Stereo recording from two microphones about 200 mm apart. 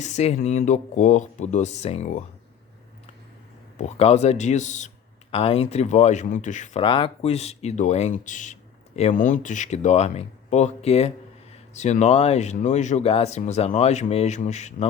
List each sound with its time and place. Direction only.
0.0 s speech: 35° left (ahead or behind)
3.8 s speech: 30° left (ahead or behind)
6.8 s speech: 25° left (ahead or behind)